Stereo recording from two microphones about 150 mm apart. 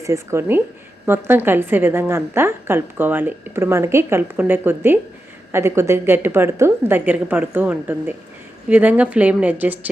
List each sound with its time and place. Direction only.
0.0 s a woman's voice: 20° right (ahead or behind)